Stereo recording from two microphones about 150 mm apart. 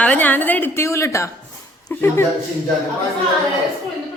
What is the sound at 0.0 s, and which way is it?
A woman's voice, 10° left (ahead or behind).